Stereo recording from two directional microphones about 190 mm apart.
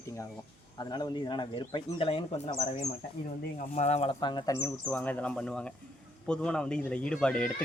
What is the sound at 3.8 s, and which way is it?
Speech, 35° left (ahead or behind).